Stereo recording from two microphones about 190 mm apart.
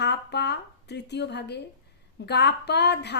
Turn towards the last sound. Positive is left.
turn(degrees=60)  # may be behind; listen again after turning